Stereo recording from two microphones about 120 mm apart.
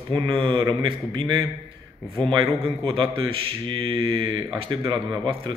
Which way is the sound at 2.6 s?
50° right (ahead or behind).